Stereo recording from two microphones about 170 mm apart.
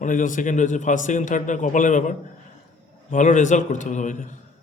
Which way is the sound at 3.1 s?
50° left (ahead or behind).